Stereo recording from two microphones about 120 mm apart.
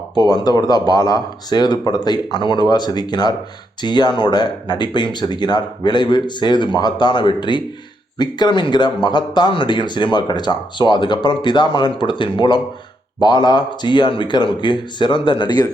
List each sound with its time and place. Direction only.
0.2 s speech: 35° left (ahead or behind)